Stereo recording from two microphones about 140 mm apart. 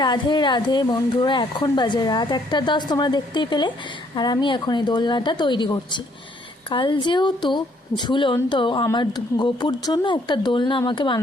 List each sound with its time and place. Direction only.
0.0 s a woman's voice: 30° left (ahead or behind)